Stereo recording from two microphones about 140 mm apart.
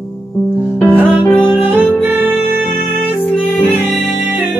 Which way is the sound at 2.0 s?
15° right (ahead or behind).